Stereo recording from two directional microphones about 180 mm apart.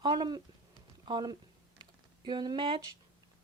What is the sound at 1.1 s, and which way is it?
Speech, 25° right (ahead or behind).